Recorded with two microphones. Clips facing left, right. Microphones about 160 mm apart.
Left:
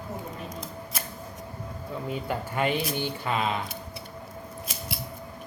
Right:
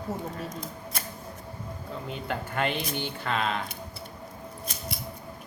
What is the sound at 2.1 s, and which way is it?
Speech, 5° left (ahead or behind).